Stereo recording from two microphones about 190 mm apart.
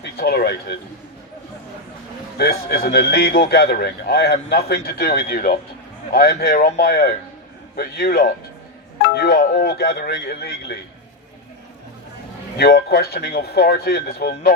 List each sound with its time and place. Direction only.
0.0 s a sound: 55° left (ahead or behind)
2.4 s speech: 55° left (ahead or behind)
12.5 s speech: 55° left (ahead or behind)